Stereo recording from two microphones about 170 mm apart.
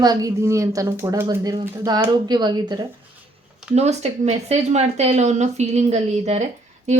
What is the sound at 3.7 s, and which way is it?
Speech, 40° right (ahead or behind).